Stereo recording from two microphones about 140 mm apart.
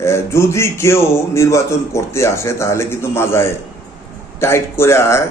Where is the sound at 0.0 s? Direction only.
20° left (ahead or behind).